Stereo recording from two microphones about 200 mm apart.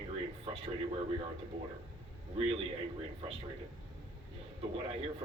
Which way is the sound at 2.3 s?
30° right (ahead or behind).